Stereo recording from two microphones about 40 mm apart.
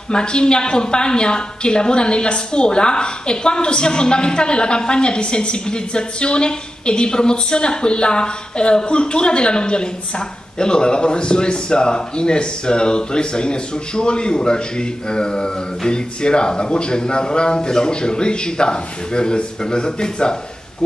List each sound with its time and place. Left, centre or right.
0.1 s a woman's voice: left